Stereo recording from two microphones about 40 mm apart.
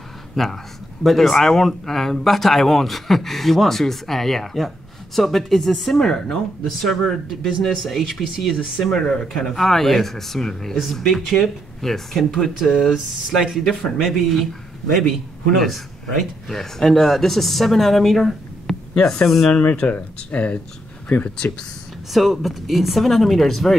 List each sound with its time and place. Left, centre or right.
0.4 s speech: centre
1.0 s a man's voice: centre
8.9 s speech: centre
9.5 s a man's voice: centre
18.9 s speech: left
19.2 s a man's voice: centre
19.8 s speech: left
22.1 s a man's voice: centre